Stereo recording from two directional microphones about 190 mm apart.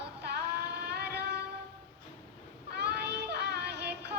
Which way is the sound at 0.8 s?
55° right (ahead or behind).